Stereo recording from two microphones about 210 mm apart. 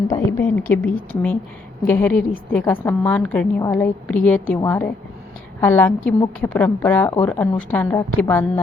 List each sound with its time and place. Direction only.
0.3 s a woman's voice: 10° left (ahead or behind)